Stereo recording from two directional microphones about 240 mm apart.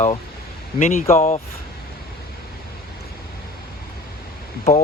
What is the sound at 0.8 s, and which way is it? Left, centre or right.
Speech, left.